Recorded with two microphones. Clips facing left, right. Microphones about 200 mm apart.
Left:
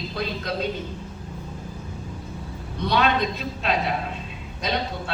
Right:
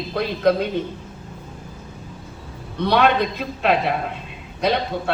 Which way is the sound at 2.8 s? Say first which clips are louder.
Right 4 dB; 60° right (ahead or behind).